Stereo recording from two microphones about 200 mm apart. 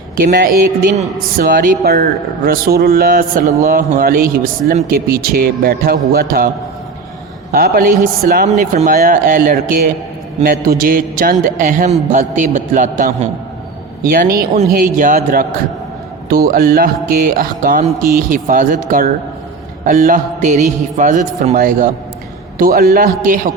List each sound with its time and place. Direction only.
0.2 s a man's voice: 50° right (ahead or behind)
7.5 s a man's voice: 45° right (ahead or behind)